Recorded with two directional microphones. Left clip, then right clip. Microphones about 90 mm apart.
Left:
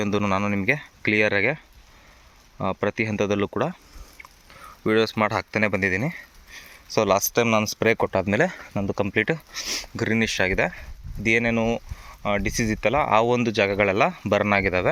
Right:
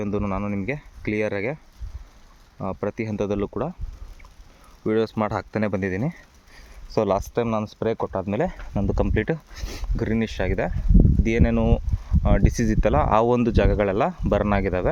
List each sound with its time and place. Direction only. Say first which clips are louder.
0.0 s speech: left 4 dB; centre (ahead or behind)
2.6 s speech: left 4 dB; 5° left (ahead or behind)
4.9 s speech: left 2 dB; 25° right (ahead or behind)
7.3 s speech: left 4 dB; centre (ahead or behind)
8.0 s speech: left 4 dB; 30° left (ahead or behind)
8.9 s speech: right 1 dB; 60° right (ahead or behind)
9.1 s speech: left 2 dB; 45° right (ahead or behind)
9.9 s speech: left 2 dB; 30° right (ahead or behind); by 11.8 s 60° right (ahead or behind)
12.2 s speech: even; 80° right
13.7 s speech: left 1 dB; 50° right (ahead or behind)